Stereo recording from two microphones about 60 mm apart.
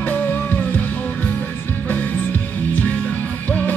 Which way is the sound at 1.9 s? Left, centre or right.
Left.